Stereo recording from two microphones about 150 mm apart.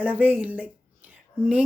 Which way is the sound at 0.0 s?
10° right (ahead or behind).